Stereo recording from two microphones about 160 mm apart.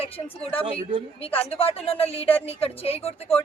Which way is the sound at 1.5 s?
35° left (ahead or behind).